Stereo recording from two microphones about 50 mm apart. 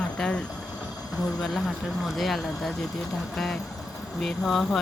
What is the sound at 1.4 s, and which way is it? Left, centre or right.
Speech, centre.